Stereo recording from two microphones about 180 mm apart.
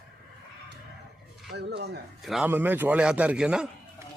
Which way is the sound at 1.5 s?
70° right (ahead or behind).